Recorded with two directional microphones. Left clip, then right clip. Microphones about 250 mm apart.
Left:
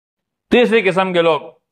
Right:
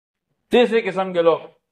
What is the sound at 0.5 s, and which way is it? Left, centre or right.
Speech, left.